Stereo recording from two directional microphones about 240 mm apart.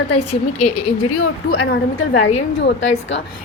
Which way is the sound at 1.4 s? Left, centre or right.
Left.